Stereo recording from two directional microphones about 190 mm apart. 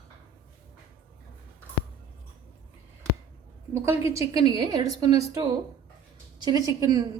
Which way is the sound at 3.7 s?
15° right (ahead or behind).